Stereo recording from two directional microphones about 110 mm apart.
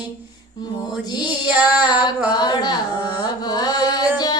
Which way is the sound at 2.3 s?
40° left (ahead or behind).